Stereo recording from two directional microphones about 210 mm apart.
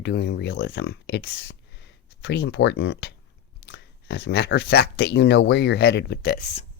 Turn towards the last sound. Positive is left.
turn(degrees=50)  # may be behind; listen again after turning